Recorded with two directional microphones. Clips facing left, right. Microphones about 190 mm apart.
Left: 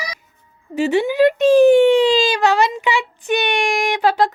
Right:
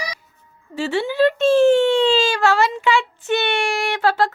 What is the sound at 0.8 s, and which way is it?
Speech, 15° left (ahead or behind).